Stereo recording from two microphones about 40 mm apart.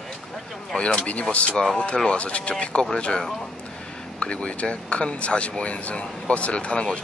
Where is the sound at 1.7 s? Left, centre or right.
Centre.